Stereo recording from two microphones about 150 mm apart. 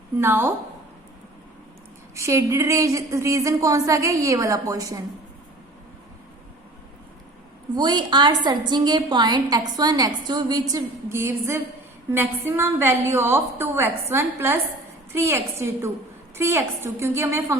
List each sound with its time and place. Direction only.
0.2 s a woman's voice: 15° right (ahead or behind)
2.1 s a woman's voice: 20° right (ahead or behind)
7.8 s a woman's voice: 30° right (ahead or behind)